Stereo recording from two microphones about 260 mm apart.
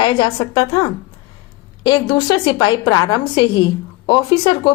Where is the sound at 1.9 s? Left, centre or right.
Centre.